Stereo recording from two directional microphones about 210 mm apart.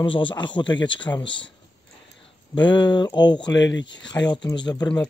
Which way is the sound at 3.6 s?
60° left (ahead or behind).